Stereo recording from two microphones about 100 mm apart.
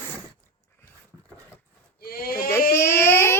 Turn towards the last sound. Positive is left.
turn(degrees=25)  # may be behind; listen again after turning